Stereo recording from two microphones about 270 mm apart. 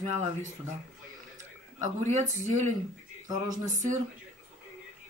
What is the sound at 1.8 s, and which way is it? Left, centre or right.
Speech, right.